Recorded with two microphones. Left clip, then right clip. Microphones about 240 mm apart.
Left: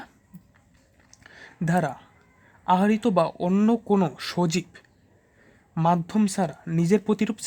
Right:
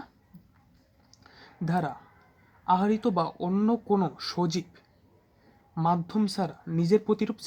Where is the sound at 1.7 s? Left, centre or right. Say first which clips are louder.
Left 5 dB; left.